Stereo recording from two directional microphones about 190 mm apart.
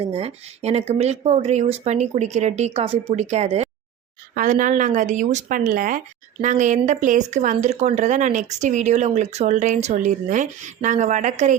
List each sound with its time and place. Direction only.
0.1 s speech: 35° right (ahead or behind)